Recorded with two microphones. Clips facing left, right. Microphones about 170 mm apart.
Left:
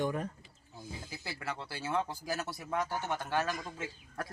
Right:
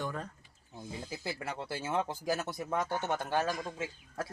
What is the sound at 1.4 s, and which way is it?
Speech, 20° right (ahead or behind).